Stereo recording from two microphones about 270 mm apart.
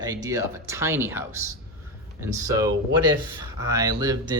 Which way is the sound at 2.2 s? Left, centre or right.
Centre.